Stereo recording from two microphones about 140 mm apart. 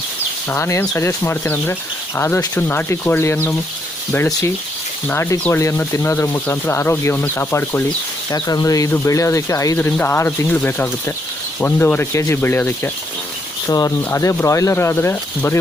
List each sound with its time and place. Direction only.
0.5 s speech: 20° left (ahead or behind)
5.0 s speech: 15° left (ahead or behind)
8.3 s speech: 25° left (ahead or behind)